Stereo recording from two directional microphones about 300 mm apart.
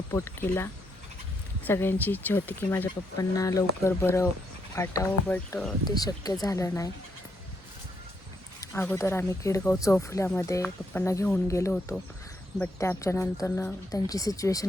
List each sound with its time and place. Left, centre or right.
0.1 s speech: centre
8.6 s speech: centre